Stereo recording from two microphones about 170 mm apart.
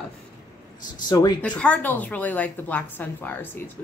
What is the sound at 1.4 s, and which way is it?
A woman's voice, 5° left (ahead or behind).